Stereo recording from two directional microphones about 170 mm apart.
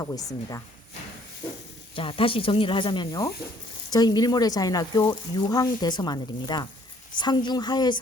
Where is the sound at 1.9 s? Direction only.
30° left (ahead or behind).